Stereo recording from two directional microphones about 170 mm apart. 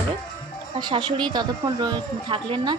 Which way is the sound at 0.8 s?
25° right (ahead or behind).